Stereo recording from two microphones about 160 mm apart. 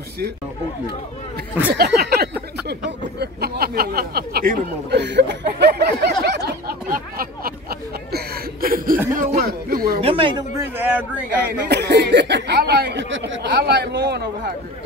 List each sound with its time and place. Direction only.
1.7 s a sound: 70° right (ahead or behind)
2.7 s speech: 85° right
6.2 s a sound: 85° right; by 7.5 s 65° right (ahead or behind)
8.1 s chuckle: 65° right (ahead or behind)
9.9 s speech: 35° right (ahead or behind)
10.8 s speech: 10° right (ahead or behind)
11.6 s speech: 90° right